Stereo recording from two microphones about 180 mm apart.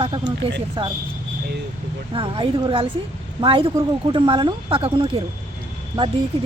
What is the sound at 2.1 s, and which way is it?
Speech, 30° right (ahead or behind).